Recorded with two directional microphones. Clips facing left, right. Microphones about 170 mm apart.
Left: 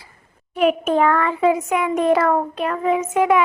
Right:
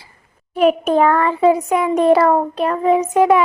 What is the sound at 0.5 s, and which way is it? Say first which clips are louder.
A child's voice: right 3 dB; 35° right (ahead or behind).